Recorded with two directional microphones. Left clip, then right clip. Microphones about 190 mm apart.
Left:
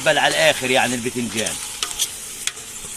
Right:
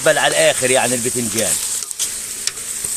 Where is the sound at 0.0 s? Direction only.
65° right (ahead or behind).